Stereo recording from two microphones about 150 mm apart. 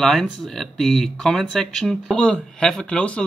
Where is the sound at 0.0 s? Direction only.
Centre (ahead or behind).